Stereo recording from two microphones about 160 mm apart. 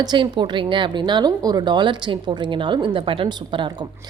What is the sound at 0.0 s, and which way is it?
A woman's voice, 30° right (ahead or behind).